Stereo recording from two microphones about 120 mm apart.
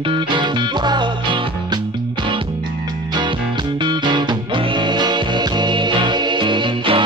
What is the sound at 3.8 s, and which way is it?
Music, 40° right (ahead or behind).